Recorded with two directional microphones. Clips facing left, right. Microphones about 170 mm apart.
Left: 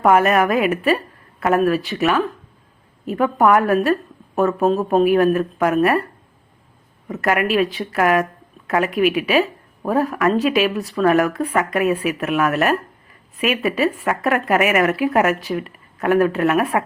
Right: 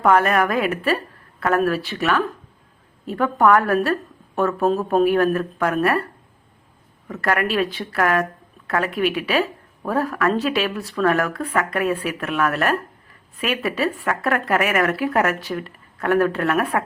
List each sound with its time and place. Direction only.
0.0 s speech: 15° left (ahead or behind); by 2.0 s centre (ahead or behind)
3.1 s speech: 15° left (ahead or behind)
5.0 s speech: 15° left (ahead or behind)
7.1 s speech: 15° left (ahead or behind)
7.6 s speech: centre (ahead or behind)
7.9 s a woman's voice: 15° left (ahead or behind)